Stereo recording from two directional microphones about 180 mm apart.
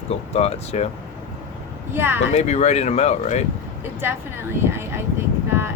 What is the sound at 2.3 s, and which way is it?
Speech, 40° left (ahead or behind).